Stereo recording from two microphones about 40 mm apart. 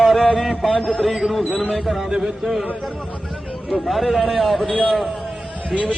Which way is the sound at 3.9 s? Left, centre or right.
Centre.